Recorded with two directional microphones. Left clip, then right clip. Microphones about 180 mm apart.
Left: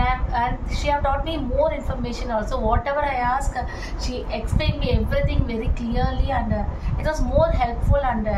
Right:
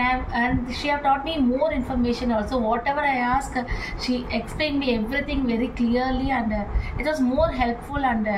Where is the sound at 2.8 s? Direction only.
30° left (ahead or behind).